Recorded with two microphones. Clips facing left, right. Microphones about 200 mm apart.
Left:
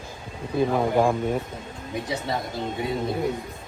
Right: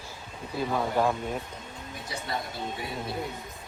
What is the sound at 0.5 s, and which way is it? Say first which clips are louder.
Speech: left 6 dB; 15° left (ahead or behind).